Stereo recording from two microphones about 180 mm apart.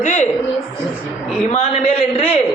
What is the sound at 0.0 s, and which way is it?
Speech, 45° left (ahead or behind).